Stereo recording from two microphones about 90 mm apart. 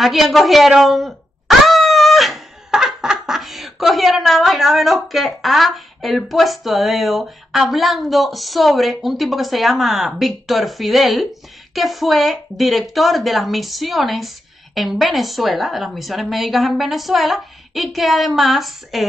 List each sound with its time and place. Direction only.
0.0 s a woman's voice: centre (ahead or behind)